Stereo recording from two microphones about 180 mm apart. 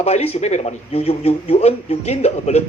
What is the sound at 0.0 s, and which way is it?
Speech, 35° left (ahead or behind).